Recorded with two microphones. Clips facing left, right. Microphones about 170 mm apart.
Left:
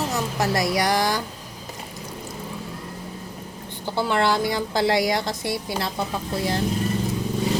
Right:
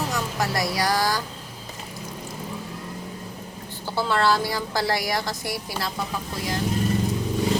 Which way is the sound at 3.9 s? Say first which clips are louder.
Left 1 dB; 15° left (ahead or behind).